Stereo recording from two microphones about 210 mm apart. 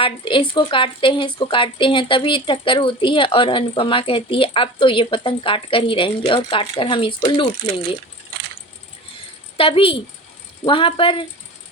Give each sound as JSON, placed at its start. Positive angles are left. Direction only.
{"t": 0.0, "sound": "speech", "side_deg": 25}
{"t": 9.6, "sound": "speech", "side_deg": 25}